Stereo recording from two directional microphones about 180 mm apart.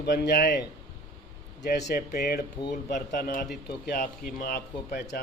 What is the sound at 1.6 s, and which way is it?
Speech, 65° left (ahead or behind).